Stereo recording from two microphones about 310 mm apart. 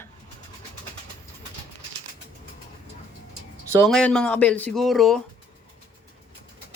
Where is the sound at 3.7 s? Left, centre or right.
Centre.